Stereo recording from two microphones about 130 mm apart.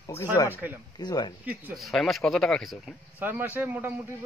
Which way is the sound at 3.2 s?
15° right (ahead or behind).